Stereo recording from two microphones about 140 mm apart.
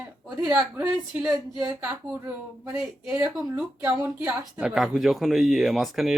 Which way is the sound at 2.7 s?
5° right (ahead or behind).